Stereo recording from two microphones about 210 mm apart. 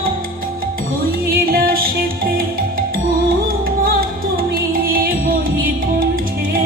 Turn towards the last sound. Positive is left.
turn(degrees=-45)  # may be behind; listen again after turning